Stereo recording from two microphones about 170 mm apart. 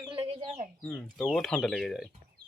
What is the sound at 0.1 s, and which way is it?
Chicken, 35° right (ahead or behind).